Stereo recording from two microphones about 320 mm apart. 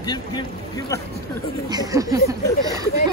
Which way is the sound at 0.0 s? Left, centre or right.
Centre.